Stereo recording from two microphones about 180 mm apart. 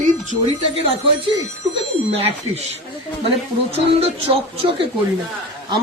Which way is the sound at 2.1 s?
35° right (ahead or behind).